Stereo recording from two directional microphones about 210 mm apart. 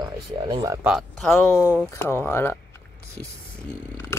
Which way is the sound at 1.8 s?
10° left (ahead or behind).